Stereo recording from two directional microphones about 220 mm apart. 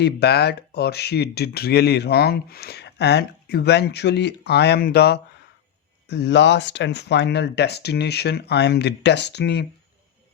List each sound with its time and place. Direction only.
0.0 s speech: 50° left (ahead or behind)